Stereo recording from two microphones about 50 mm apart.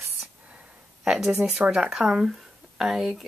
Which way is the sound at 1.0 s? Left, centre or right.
Centre.